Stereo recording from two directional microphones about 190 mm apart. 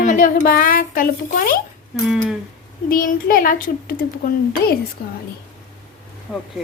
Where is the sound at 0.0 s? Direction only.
45° left (ahead or behind).